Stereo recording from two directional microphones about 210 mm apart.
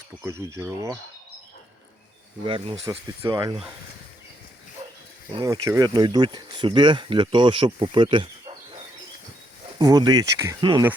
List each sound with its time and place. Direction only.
0.3 s speech: 15° right (ahead or behind)
2.8 s speech: 20° right (ahead or behind)
5.3 s speech: 20° right (ahead or behind)
9.7 s speech: 20° right (ahead or behind)